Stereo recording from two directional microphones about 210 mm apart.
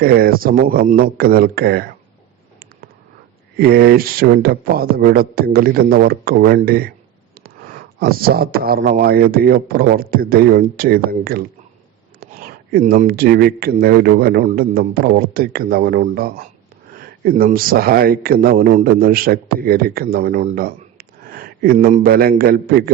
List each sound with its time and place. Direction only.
0.0 s speech: 45° right (ahead or behind)
3.6 s speech: 50° right (ahead or behind)
7.9 s speech: 45° right (ahead or behind)